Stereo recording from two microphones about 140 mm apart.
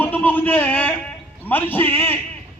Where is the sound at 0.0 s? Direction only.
10° left (ahead or behind).